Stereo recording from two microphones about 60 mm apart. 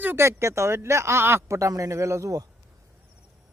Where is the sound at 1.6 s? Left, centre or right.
Right.